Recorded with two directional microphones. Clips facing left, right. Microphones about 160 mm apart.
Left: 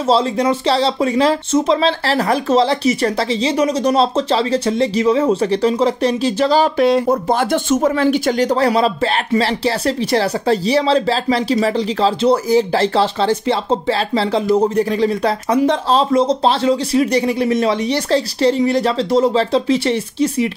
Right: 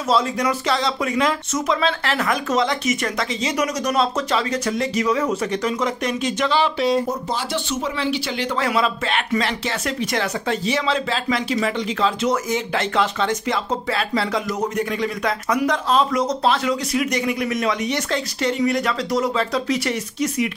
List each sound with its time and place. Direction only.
0.0 s speech: 30° left (ahead or behind)
6.8 s speech: 60° left (ahead or behind); by 20.4 s 30° left (ahead or behind)